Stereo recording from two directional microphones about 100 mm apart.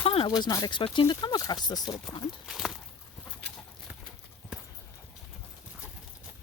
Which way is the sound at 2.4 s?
5° right (ahead or behind).